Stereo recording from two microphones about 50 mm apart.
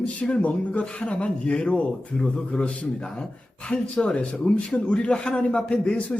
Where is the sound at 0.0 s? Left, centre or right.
Left.